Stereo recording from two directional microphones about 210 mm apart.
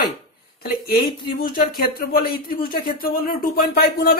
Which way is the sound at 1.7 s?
45° left (ahead or behind).